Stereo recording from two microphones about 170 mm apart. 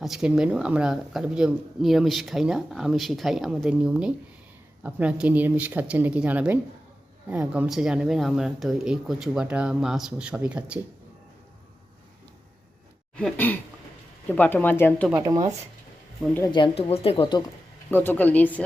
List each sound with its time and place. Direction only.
0.0 s speech: 5° right (ahead or behind)
13.1 s speech: 10° left (ahead or behind)
15.1 s speech: 20° right (ahead or behind)
16.5 s speech: 30° left (ahead or behind)
17.9 s speech: 10° left (ahead or behind)